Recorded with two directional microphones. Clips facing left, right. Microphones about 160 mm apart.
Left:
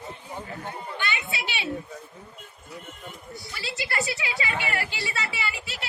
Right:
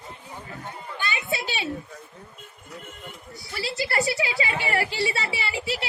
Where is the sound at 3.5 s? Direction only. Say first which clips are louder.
Right 5 dB; 35° right (ahead or behind).